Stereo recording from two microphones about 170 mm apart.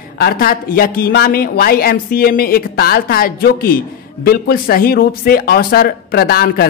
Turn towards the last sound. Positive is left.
turn(degrees=65)  # may be behind; listen again after turning